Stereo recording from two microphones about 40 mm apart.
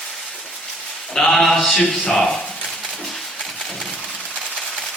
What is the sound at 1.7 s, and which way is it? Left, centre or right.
Speech, centre.